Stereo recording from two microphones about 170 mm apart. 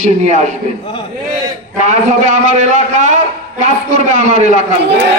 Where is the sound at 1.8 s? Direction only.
45° right (ahead or behind).